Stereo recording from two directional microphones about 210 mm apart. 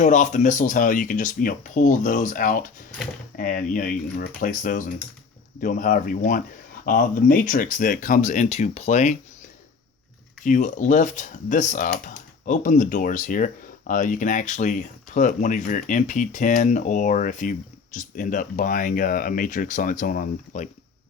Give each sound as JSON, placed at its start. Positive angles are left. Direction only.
{"t": 0.0, "sound": "speech", "side_deg": 35}
{"t": 10.4, "sound": "speech", "side_deg": 35}